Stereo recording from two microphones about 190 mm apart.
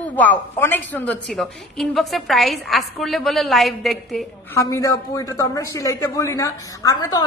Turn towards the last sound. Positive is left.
turn(degrees=20)  # may be behind; listen again after turning